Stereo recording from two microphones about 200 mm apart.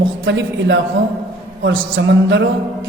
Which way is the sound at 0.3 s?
65° right (ahead or behind).